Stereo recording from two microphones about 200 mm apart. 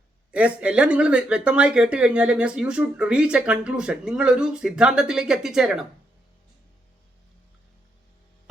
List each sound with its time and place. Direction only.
0.3 s speech: 5° right (ahead or behind)